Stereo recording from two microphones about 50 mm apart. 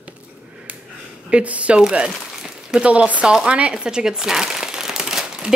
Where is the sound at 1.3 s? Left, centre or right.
Right.